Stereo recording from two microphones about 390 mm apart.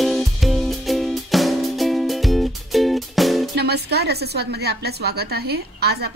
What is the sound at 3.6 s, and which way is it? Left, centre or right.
Speech, right.